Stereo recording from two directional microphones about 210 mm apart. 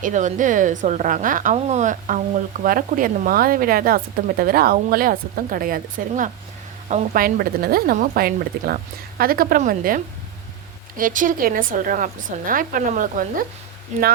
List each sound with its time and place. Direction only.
0.0 s a woman's voice: 35° right (ahead or behind)